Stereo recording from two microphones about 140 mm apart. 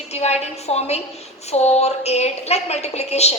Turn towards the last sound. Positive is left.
turn(degrees=50)  # may be behind; listen again after turning